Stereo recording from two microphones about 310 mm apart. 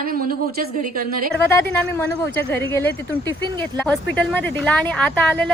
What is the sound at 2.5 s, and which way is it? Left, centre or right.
Speech, centre.